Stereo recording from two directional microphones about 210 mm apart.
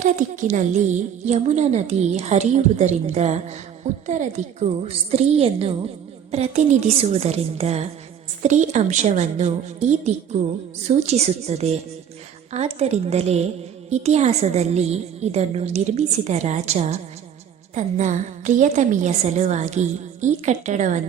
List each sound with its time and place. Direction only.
0.0 s a woman's voice: 35° right (ahead or behind)